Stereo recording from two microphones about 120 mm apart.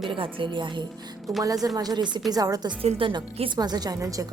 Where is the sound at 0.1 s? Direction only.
45° right (ahead or behind).